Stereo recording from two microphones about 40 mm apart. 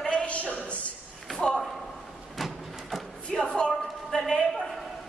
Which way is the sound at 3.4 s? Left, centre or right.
Left.